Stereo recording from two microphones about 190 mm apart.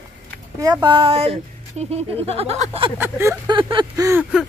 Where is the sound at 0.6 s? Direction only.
20° right (ahead or behind).